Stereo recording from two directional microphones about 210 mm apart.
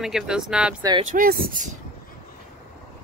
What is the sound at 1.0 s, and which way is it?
Speech, 40° right (ahead or behind).